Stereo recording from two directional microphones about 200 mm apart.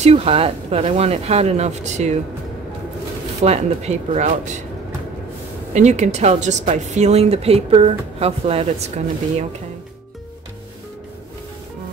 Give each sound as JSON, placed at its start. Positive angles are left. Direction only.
{"t": 0.0, "sound": "speech", "side_deg": -30}
{"t": 3.4, "sound": "speech", "side_deg": -35}
{"t": 5.7, "sound": "speech", "side_deg": -35}